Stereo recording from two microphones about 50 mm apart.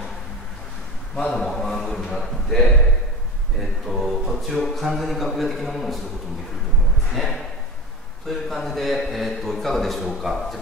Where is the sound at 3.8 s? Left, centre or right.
Centre.